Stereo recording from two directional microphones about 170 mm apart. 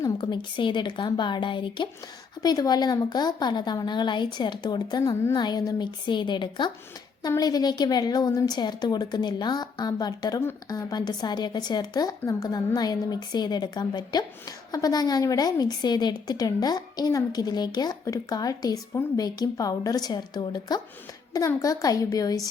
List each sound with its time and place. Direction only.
0.0 s a woman's voice: 25° left (ahead or behind)